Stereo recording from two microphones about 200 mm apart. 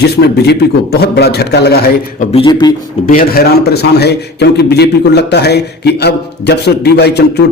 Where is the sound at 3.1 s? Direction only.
45° left (ahead or behind).